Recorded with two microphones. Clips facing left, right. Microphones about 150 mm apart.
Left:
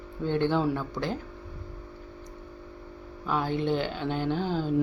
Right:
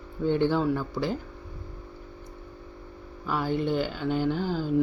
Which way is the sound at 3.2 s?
5° right (ahead or behind).